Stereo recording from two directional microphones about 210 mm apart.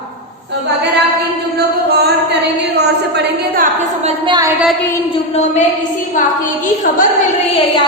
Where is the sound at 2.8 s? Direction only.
45° right (ahead or behind).